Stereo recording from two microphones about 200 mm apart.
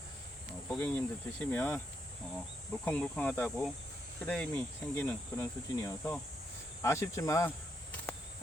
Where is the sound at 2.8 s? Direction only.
10° left (ahead or behind).